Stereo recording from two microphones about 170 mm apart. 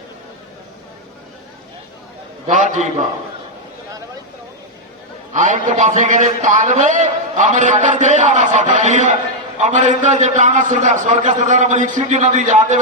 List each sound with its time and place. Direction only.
2.5 s a man's voice: 45° right (ahead or behind)
5.3 s a man's voice: 45° right (ahead or behind)